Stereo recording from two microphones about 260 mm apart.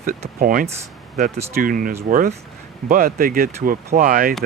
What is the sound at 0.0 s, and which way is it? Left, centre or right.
Speech, right.